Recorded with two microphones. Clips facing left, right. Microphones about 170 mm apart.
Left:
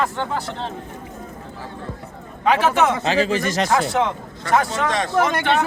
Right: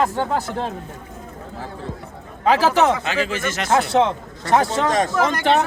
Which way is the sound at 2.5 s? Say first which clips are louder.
Right 1 dB; 30° right (ahead or behind).